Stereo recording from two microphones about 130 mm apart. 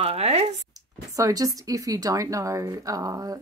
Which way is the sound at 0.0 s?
50° right (ahead or behind).